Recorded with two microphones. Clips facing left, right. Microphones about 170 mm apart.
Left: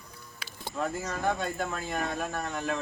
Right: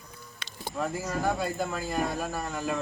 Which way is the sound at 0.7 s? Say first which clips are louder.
Right 1 dB; 5° right (ahead or behind).